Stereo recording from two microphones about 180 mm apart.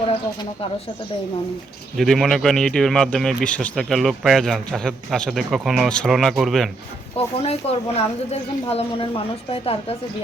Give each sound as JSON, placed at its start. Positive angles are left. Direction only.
{"t": 2.0, "sound": "a man's voice", "side_deg": 0}
{"t": 7.2, "sound": "speech", "side_deg": 35}